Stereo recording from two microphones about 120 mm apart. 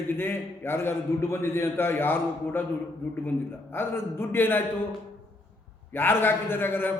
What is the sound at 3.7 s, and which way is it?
Speech, 20° left (ahead or behind).